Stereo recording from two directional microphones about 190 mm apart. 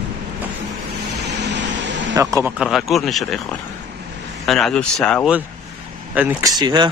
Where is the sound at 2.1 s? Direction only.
15° right (ahead or behind).